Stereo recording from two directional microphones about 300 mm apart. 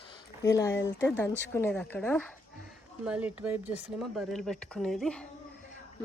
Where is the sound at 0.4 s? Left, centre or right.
Centre.